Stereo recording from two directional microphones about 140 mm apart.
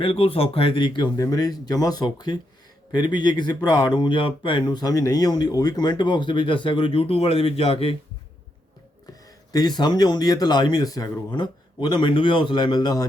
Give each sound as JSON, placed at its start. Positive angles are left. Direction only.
{"t": 0.0, "sound": "speech", "side_deg": 40}
{"t": 9.5, "sound": "speech", "side_deg": 30}